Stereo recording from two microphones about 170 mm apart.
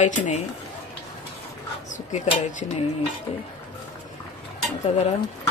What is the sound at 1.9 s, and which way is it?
Speech, 45° left (ahead or behind).